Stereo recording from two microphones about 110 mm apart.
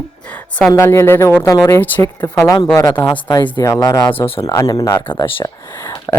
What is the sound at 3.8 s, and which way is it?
Speech, 35° left (ahead or behind).